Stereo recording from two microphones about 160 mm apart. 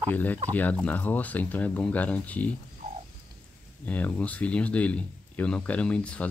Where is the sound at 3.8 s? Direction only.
10° left (ahead or behind).